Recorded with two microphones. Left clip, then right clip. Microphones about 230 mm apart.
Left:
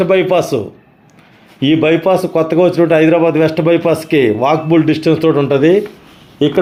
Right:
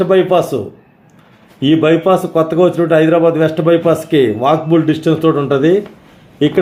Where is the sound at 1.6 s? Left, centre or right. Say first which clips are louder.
Even; centre.